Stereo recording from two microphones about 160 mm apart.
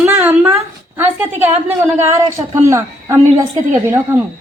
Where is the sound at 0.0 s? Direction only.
15° right (ahead or behind).